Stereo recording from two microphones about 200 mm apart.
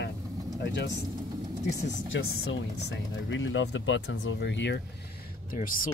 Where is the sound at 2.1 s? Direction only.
70° left (ahead or behind).